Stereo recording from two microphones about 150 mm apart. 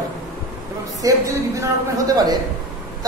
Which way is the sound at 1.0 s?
25° right (ahead or behind).